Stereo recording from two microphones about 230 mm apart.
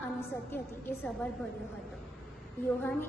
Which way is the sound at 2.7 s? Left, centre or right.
Centre.